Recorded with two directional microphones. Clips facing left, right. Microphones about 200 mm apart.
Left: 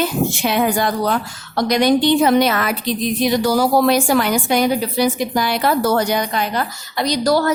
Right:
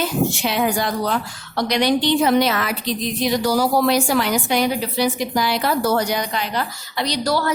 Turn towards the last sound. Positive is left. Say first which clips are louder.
# left 5 dB
turn(degrees=45)  # may be behind; listen again after turning